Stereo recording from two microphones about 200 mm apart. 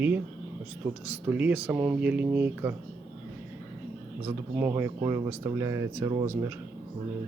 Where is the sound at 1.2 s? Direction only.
10° right (ahead or behind).